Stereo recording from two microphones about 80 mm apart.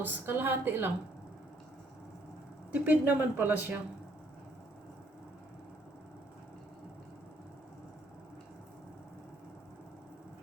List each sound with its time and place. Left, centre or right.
0.0 s speech: right
2.7 s speech: right